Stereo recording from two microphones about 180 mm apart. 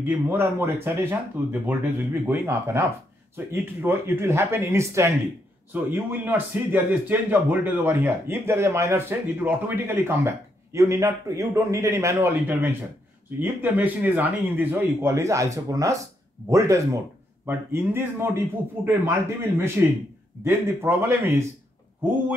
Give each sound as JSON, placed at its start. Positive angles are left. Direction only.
{"t": 0.0, "sound": "a man's voice", "side_deg": -10}